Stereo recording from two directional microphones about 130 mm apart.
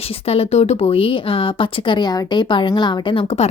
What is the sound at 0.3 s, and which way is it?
Speech, 55° left (ahead or behind).